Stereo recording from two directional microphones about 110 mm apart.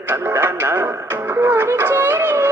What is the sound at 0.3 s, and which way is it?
Radio, 20° right (ahead or behind).